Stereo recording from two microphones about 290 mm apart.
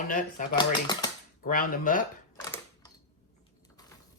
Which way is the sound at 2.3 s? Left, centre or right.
Centre.